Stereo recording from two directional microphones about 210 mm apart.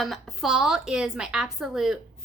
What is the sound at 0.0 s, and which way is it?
A woman's voice, centre (ahead or behind).